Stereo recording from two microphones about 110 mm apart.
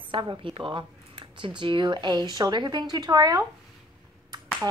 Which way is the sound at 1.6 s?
45° right (ahead or behind).